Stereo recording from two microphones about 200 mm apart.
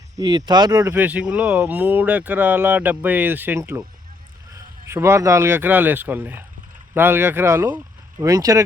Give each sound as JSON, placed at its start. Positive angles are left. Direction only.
{"t": 0.2, "sound": "speech", "side_deg": -20}